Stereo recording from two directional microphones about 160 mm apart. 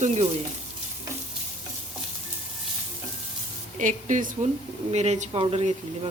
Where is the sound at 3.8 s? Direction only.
50° right (ahead or behind).